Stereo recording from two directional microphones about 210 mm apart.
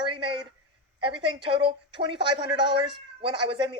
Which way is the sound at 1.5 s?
20° right (ahead or behind).